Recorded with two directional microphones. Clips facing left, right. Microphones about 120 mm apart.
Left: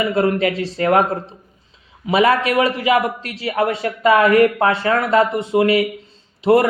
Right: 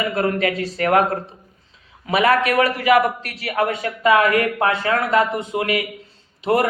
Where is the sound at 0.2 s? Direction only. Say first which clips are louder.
Left 2 dB; 25° left (ahead or behind).